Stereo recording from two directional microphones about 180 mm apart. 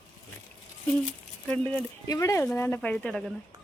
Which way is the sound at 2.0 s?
20° left (ahead or behind).